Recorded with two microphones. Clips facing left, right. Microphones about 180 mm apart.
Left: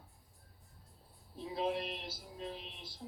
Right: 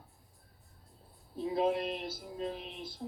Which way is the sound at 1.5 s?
50° right (ahead or behind).